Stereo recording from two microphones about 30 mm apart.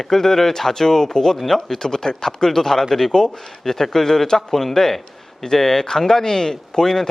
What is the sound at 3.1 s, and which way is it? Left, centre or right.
Speech, left.